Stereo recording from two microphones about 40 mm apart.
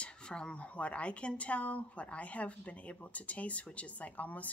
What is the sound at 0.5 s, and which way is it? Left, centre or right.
Speech, left.